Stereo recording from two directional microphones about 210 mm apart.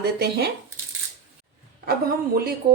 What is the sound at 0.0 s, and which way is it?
Speech, 50° right (ahead or behind).